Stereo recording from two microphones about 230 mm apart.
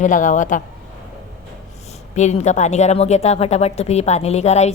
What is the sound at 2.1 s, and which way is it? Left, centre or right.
A woman's voice, left.